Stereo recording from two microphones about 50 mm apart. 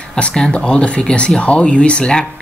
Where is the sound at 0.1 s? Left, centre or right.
Centre.